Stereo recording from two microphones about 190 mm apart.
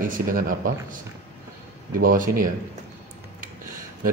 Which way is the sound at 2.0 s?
45° right (ahead or behind).